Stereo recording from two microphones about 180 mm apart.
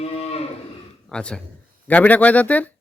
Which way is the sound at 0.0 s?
35° left (ahead or behind).